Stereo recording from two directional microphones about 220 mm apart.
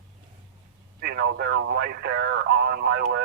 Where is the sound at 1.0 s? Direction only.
45° right (ahead or behind).